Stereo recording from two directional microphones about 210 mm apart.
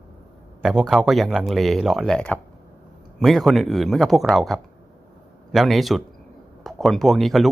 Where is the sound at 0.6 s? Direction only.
Centre (ahead or behind).